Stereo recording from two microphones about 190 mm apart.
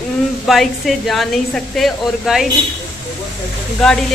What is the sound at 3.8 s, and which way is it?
Speech, 5° left (ahead or behind).